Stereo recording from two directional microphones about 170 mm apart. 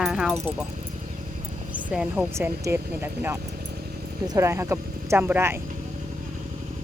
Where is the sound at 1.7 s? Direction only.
5° right (ahead or behind).